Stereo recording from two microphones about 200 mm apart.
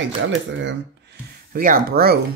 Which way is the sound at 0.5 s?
65° right (ahead or behind).